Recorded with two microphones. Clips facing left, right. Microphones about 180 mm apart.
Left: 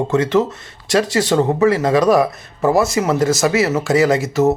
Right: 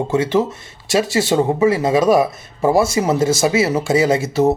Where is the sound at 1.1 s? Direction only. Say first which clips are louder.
Even; 25° right (ahead or behind).